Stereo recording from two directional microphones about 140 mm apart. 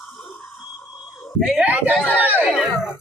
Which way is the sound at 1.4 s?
5° right (ahead or behind).